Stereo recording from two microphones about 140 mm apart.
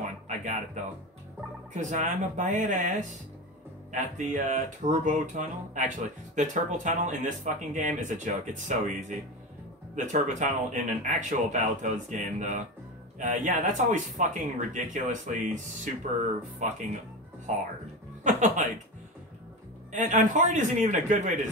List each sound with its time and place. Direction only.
0.8 s speech: 65° right (ahead or behind)
9.9 s speech: 60° right (ahead or behind)
19.9 s speech: 60° right (ahead or behind)